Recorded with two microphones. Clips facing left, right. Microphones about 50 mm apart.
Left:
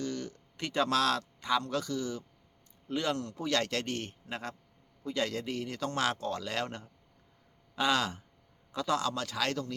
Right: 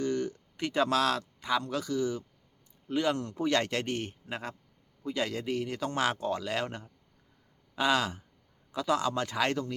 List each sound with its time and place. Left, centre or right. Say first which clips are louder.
0.0 s a sound: right 6 dB; right
0.6 s speech: right 2 dB; centre
3.2 s speech: right 3 dB; right
9.1 s speech: right 3 dB; right